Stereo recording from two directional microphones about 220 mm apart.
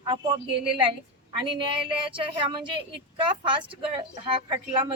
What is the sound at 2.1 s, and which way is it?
A woman's voice, 25° right (ahead or behind).